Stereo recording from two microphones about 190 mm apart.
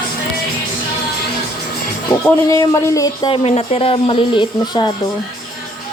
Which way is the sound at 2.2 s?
15° left (ahead or behind).